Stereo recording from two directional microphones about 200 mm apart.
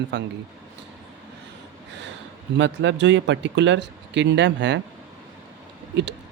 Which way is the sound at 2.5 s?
60° right (ahead or behind).